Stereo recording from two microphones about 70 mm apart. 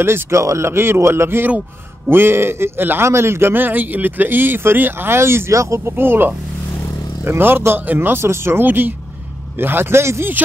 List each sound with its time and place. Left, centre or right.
0.0 s speech: right